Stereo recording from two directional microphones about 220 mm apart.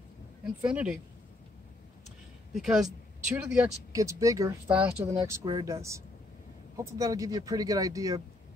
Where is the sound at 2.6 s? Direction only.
Centre (ahead or behind).